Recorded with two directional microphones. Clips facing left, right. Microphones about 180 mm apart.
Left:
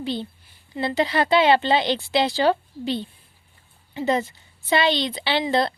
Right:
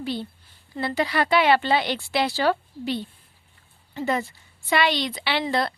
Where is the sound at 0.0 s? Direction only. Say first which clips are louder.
Left 2 dB; 25° left (ahead or behind).